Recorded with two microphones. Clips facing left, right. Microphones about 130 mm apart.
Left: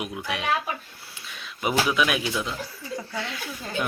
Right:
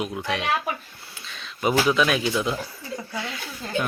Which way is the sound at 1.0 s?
10° left (ahead or behind).